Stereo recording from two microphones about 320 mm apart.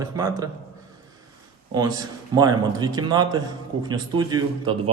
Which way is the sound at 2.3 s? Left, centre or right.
Centre.